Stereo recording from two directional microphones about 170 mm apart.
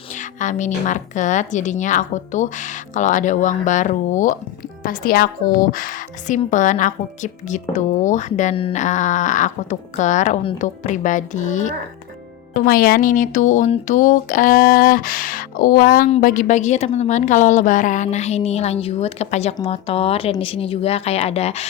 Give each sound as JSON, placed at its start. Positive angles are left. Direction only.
{"t": 0.1, "sound": "a woman's voice", "side_deg": 45}
{"t": 4.8, "sound": "a woman's voice", "side_deg": 60}
{"t": 12.5, "sound": "speech", "side_deg": 60}
{"t": 16.2, "sound": "a woman's voice", "side_deg": 50}